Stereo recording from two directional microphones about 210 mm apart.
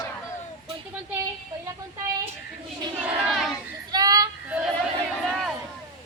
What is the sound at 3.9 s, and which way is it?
Child singing, 15° right (ahead or behind).